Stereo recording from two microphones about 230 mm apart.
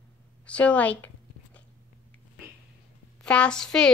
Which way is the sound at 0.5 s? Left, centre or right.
Centre.